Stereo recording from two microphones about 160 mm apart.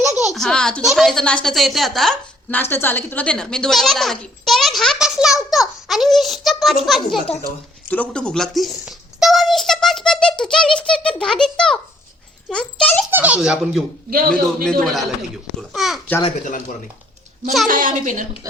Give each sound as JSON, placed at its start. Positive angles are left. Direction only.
{"t": 0.1, "sound": "baby laughter", "side_deg": 20}
{"t": 0.3, "sound": "speech", "side_deg": 5}
{"t": 2.6, "sound": "speech", "side_deg": 15}
{"t": 13.1, "sound": "speech", "side_deg": -10}
{"t": 17.7, "sound": "a woman's voice", "side_deg": -60}